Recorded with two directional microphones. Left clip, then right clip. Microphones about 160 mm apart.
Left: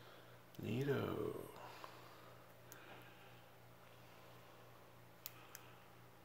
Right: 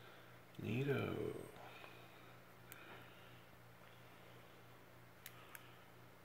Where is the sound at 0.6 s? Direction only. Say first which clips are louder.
Even; 10° left (ahead or behind).